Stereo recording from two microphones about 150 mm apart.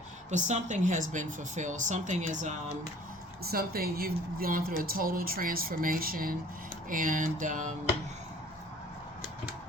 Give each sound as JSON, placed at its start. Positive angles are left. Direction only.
{"t": 0.3, "sound": "a woman's voice", "side_deg": -55}
{"t": 3.5, "sound": "speech", "side_deg": -90}
{"t": 6.9, "sound": "a woman's voice", "side_deg": -65}